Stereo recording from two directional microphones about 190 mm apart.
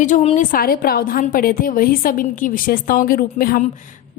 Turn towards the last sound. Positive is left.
turn(degrees=40)  # may be behind; listen again after turning